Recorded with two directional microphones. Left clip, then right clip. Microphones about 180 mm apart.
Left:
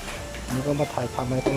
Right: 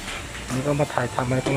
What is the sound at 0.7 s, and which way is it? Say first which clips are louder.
Speech: right 5 dB; 5° right (ahead or behind).